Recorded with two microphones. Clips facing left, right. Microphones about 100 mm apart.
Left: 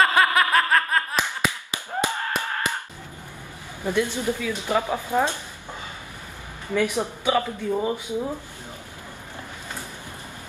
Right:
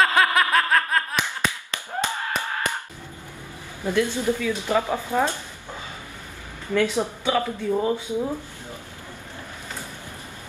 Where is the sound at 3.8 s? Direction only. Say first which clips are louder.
Right 2 dB; 15° left (ahead or behind).